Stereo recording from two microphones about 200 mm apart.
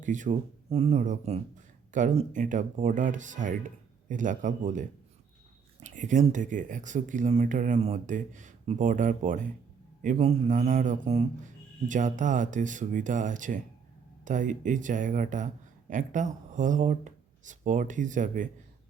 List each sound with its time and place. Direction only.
0.0 s speech: 40° right (ahead or behind)